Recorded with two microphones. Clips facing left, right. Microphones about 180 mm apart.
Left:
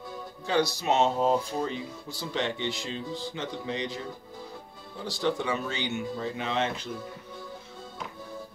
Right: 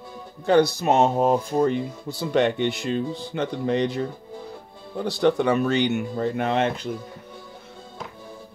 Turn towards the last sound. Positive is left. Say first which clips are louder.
# right 7 dB
turn(degrees=-60)  # may be behind; listen again after turning